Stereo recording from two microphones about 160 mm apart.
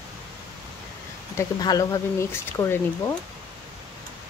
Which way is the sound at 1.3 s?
25° left (ahead or behind).